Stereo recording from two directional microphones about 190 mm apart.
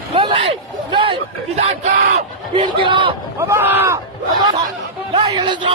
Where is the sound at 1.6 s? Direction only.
35° right (ahead or behind).